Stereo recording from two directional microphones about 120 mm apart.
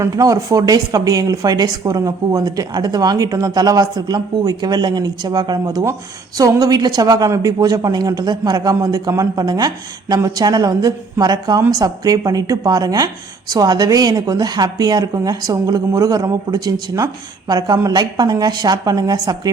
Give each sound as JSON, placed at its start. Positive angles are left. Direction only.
{"t": 0.0, "sound": "speech", "side_deg": -30}